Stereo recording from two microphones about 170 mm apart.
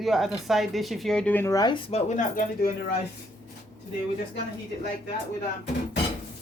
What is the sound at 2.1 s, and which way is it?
Speech, 50° left (ahead or behind).